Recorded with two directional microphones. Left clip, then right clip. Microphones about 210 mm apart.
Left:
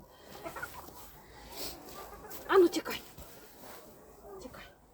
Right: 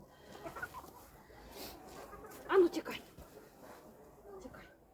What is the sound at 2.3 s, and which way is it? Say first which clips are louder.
Dog: left 4 dB; 50° left (ahead or behind).